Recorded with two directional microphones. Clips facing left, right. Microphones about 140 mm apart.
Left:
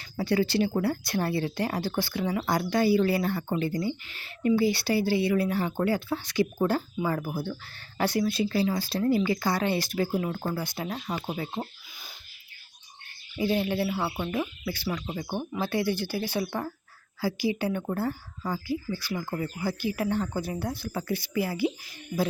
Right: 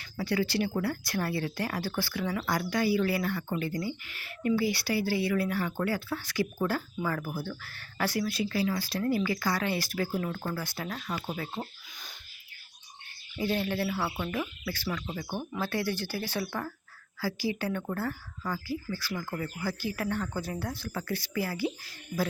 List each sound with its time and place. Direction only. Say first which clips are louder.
0.0 s speech: left 4 dB; 25° left (ahead or behind)
13.3 s speech: left 3 dB; 15° left (ahead or behind)